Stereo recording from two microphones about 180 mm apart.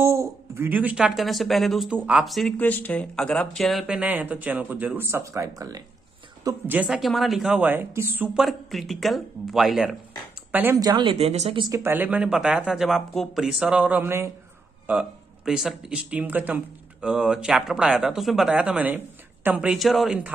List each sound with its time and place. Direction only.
0.0 s speech: 15° right (ahead or behind)
8.5 s speech: centre (ahead or behind)
10.8 s speech: 25° right (ahead or behind)
11.7 s speech: 15° right (ahead or behind)